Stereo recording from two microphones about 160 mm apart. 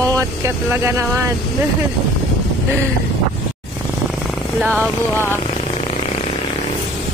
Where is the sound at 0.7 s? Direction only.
15° right (ahead or behind).